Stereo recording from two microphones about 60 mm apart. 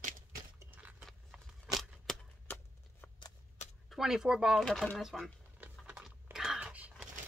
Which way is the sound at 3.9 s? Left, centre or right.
Centre.